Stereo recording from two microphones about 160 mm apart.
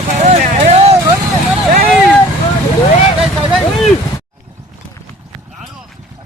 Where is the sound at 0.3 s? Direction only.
45° right (ahead or behind).